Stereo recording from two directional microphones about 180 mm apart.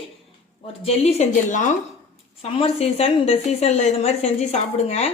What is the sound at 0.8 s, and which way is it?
A woman's voice, 35° left (ahead or behind).